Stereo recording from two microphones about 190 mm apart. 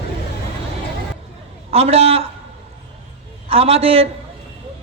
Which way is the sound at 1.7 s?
35° right (ahead or behind).